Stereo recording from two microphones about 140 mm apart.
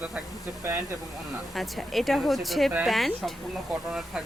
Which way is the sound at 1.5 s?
Centre (ahead or behind).